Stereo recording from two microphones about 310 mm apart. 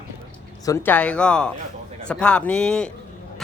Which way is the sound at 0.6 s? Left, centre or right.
Centre.